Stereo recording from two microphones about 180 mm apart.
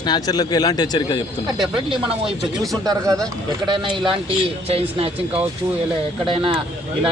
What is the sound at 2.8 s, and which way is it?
Speech, 20° right (ahead or behind).